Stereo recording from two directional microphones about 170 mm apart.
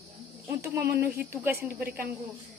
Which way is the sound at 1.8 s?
65° right (ahead or behind).